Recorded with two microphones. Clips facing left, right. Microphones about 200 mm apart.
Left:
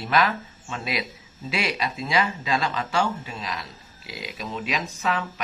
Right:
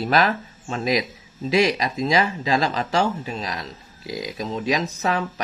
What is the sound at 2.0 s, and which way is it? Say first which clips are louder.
Speech: right 4 dB; 35° right (ahead or behind).